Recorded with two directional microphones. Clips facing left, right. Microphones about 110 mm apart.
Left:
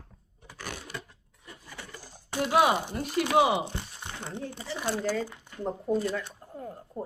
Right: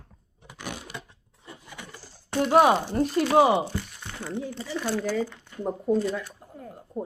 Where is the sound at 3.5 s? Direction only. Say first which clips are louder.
Right 5 dB; 20° left (ahead or behind).